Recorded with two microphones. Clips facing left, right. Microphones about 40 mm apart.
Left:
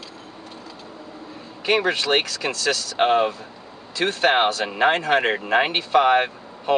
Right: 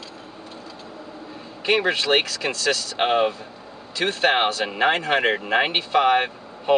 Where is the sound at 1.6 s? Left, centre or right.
Centre.